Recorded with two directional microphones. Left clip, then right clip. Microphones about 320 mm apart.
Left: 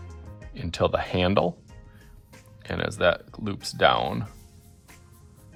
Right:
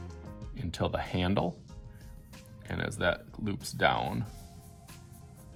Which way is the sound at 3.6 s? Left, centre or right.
Left.